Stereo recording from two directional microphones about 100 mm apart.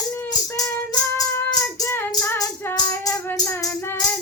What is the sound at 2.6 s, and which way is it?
Music, 25° left (ahead or behind).